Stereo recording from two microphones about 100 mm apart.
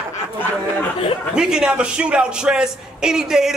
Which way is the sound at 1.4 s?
5° right (ahead or behind).